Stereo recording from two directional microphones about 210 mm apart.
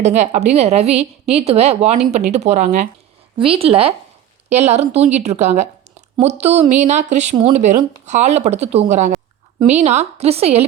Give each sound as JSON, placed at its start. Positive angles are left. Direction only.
{"t": 0.0, "sound": "a woman's voice", "side_deg": -35}